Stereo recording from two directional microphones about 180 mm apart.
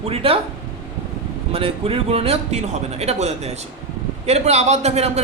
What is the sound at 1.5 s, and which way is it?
A man's voice, 30° right (ahead or behind).